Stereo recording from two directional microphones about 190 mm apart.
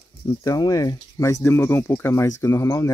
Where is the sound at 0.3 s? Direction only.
20° left (ahead or behind).